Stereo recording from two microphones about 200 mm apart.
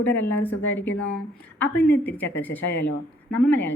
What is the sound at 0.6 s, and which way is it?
Speech, 65° left (ahead or behind).